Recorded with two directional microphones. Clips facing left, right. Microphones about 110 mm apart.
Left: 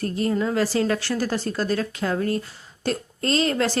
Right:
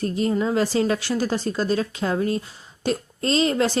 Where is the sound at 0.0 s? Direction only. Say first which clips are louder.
Right 1 dB; 20° right (ahead or behind).